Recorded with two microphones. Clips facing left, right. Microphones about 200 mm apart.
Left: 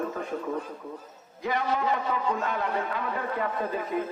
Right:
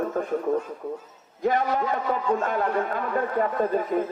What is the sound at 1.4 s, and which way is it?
A man's voice, 50° right (ahead or behind).